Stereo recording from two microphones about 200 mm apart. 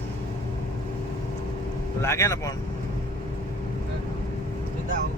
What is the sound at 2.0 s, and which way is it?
Speech, 15° left (ahead or behind).